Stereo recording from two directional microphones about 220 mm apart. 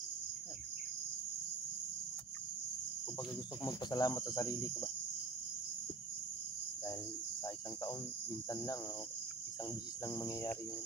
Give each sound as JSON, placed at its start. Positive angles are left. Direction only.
{"t": 3.6, "sound": "cricket", "side_deg": 15}
{"t": 10.0, "sound": "cricket", "side_deg": 15}